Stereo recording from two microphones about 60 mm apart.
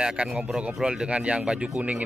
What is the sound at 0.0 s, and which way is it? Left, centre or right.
A man's voice, centre.